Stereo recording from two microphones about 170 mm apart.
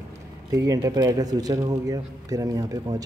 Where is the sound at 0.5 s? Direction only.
20° right (ahead or behind).